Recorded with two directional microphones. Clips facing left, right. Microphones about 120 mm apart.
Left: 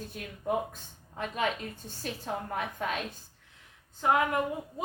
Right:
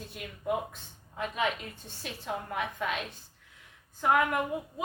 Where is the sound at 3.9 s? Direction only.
25° left (ahead or behind).